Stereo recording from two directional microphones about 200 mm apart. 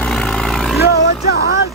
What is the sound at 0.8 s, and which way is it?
Music, 55° left (ahead or behind).